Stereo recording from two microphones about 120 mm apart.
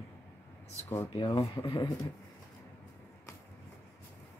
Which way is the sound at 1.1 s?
40° left (ahead or behind).